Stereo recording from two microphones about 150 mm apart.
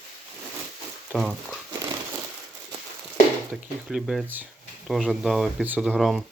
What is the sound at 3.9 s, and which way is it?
Speech, 5° right (ahead or behind).